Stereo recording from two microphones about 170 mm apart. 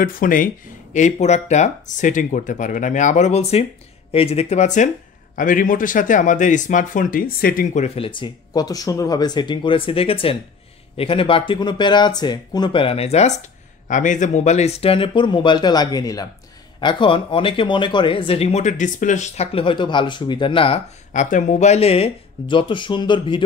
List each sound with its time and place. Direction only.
0.0 s speech: 55° left (ahead or behind)
0.9 s speech: 40° left (ahead or behind); by 7.8 s 55° left (ahead or behind)
7.8 s speech: 35° left (ahead or behind)
21.1 s speech: 45° left (ahead or behind); by 23.4 s 30° left (ahead or behind)